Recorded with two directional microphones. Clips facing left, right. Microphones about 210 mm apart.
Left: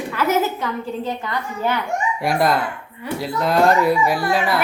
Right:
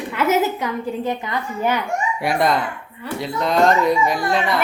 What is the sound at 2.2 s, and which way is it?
Speech, centre (ahead or behind).